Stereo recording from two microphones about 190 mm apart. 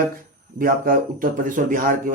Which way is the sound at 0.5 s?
50° right (ahead or behind).